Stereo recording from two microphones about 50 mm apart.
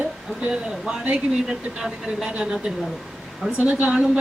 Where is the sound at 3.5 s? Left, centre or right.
Right.